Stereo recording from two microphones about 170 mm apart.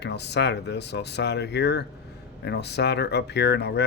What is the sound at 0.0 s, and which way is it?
Speech, 85° left.